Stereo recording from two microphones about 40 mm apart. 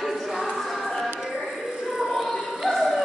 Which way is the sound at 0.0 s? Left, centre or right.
Centre.